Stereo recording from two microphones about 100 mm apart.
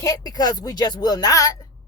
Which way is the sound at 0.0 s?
40° left (ahead or behind).